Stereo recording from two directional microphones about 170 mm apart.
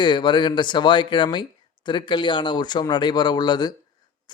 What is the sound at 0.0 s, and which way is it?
Speech, 25° left (ahead or behind).